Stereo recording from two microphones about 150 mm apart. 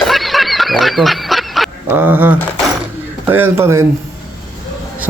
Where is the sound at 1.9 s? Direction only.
15° right (ahead or behind).